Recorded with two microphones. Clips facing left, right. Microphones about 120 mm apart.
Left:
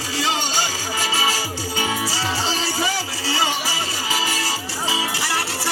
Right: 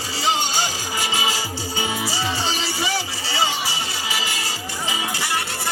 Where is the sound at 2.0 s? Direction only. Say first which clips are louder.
Left 1 dB; 40° left (ahead or behind).